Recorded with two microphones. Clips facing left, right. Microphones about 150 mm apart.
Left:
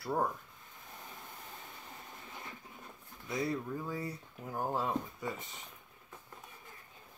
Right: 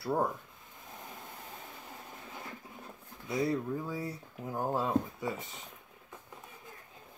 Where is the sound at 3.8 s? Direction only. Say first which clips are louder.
Right 2 dB; 5° right (ahead or behind).